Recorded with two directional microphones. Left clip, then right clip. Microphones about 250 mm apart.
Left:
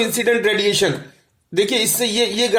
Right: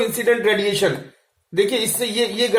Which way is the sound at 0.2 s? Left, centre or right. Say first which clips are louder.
Even; left.